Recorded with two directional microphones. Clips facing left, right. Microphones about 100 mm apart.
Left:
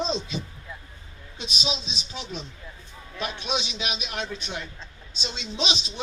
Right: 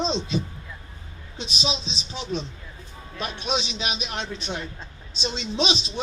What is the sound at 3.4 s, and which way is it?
Speech, 30° right (ahead or behind).